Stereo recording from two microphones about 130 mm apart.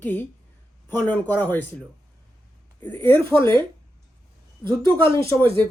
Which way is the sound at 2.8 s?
15° left (ahead or behind).